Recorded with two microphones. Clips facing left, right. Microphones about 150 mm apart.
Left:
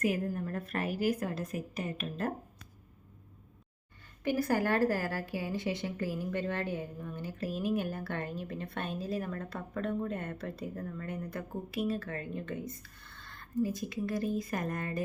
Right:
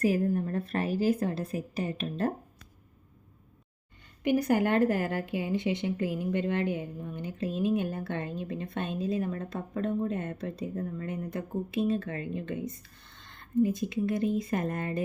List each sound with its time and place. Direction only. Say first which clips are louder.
0.0 s a woman's voice: right 5 dB; 30° right (ahead or behind)
4.2 s a woman's voice: right 4 dB; 20° right (ahead or behind)